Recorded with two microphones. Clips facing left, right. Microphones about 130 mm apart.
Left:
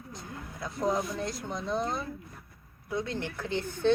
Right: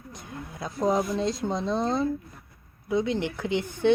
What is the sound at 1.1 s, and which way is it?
Speech, 20° right (ahead or behind).